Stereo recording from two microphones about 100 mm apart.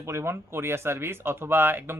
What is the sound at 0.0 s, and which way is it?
Speech, 25° right (ahead or behind).